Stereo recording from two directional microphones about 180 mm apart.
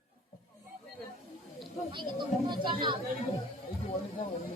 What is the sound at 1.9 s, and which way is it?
Speech, 25° right (ahead or behind).